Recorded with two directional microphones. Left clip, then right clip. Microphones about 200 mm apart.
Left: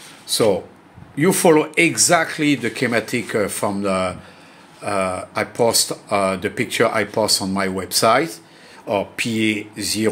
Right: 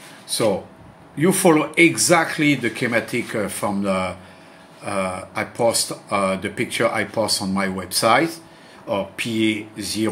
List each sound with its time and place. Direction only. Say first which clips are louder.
1.1 s speech: left 2 dB; 25° left (ahead or behind)